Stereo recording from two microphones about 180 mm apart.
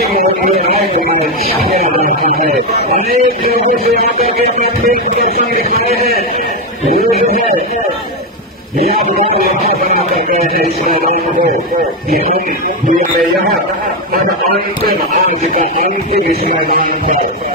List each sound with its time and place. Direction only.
2.0 s a man's voice: 45° right (ahead or behind)
16.3 s speech: 55° right (ahead or behind)